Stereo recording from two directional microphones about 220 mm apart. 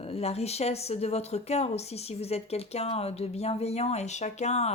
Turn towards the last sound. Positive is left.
turn(degrees=30)  # may be behind; listen again after turning